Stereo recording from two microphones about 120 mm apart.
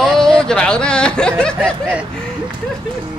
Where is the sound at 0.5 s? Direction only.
5° left (ahead or behind).